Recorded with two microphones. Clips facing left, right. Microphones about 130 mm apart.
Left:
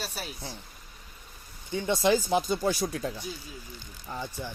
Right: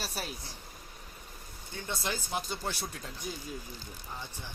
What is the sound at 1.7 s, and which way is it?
Speech, 90° left.